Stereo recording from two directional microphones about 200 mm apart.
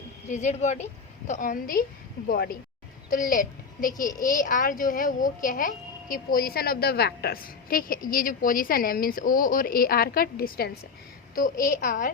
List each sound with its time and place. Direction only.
0.3 s a child's voice: 35° left (ahead or behind)